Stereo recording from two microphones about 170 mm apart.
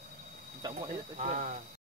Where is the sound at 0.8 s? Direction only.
45° right (ahead or behind).